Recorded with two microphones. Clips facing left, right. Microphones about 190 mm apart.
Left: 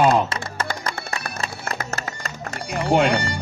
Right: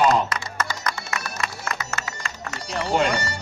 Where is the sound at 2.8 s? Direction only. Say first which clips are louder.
Left 4 dB; 55° left (ahead or behind).